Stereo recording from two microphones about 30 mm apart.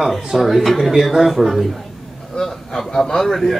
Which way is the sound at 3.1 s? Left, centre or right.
Centre.